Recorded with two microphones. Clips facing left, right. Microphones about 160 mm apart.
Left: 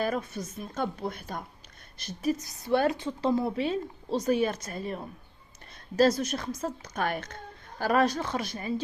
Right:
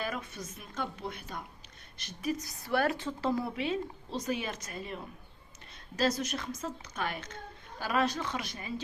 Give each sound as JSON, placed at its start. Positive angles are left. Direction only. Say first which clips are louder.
{"t": 0.0, "sound": "speech", "louder": "left 7 dB", "side_deg": 40}
{"t": 2.4, "sound": "a woman's voice", "louder": "left 4 dB", "side_deg": 20}
{"t": 3.5, "sound": "a woman's voice", "louder": "left 4 dB", "side_deg": 35}